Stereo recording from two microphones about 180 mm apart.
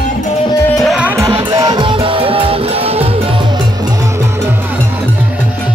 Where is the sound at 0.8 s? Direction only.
5° right (ahead or behind).